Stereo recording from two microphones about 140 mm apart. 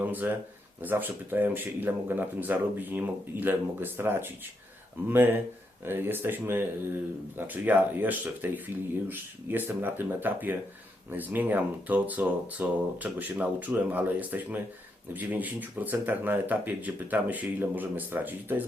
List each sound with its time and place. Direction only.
0.0 s speech: 15° right (ahead or behind)